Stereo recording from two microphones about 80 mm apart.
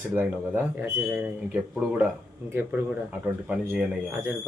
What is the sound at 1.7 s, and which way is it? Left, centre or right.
A man's voice, centre.